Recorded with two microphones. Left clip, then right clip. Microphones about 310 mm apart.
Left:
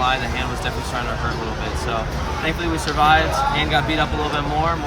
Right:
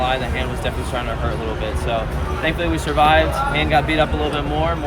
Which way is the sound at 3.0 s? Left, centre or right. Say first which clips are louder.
Right 1 dB; centre.